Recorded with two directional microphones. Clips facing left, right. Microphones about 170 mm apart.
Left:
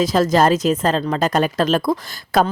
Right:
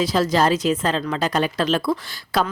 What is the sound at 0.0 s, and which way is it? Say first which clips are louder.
Speech: left 3 dB; 45° left (ahead or behind).